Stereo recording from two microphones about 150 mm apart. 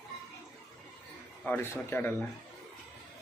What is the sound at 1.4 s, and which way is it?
Speech, 15° left (ahead or behind).